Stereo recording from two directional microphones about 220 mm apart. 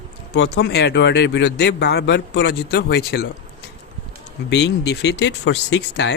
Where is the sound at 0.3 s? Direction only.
50° left (ahead or behind).